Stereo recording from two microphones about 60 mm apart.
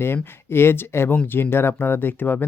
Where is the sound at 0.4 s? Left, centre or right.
Left.